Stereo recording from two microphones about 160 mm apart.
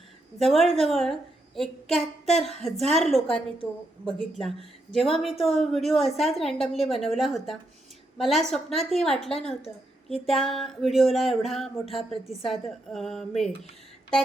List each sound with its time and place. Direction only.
0.3 s a woman's voice: centre (ahead or behind)
3.2 s a woman's voice: 35° left (ahead or behind)
4.4 s a woman's voice: centre (ahead or behind)
9.6 s a woman's voice: 40° left (ahead or behind)
10.5 s a woman's voice: centre (ahead or behind)